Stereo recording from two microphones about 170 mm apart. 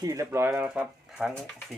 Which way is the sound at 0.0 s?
20° right (ahead or behind).